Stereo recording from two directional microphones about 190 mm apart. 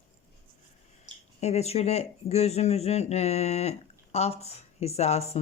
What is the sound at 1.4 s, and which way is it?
Speech, 35° left (ahead or behind).